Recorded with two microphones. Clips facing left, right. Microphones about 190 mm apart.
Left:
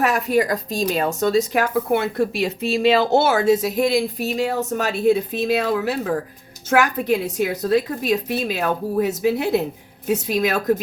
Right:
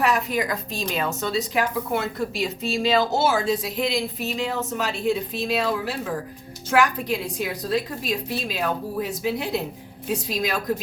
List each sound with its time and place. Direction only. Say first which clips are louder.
0.0 s a woman's voice: left 4 dB; 40° left (ahead or behind)